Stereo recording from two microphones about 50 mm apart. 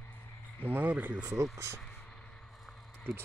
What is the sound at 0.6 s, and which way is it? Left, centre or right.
Speech, right.